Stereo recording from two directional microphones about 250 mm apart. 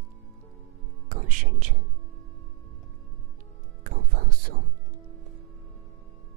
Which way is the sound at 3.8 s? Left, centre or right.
Right.